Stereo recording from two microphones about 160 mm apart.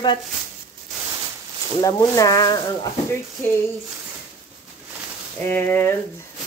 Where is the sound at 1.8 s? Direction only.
25° left (ahead or behind).